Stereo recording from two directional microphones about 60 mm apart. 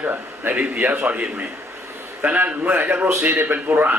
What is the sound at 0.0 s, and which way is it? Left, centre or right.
A man's voice, right.